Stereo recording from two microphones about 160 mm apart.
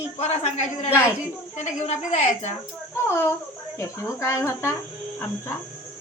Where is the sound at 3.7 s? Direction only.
15° left (ahead or behind).